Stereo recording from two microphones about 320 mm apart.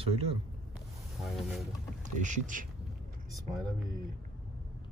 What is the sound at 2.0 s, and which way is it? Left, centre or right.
Speech, right.